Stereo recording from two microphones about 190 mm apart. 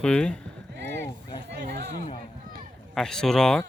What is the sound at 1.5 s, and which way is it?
Speech, 60° right (ahead or behind).